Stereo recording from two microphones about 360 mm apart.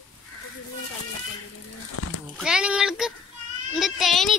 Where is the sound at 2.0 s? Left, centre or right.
Left.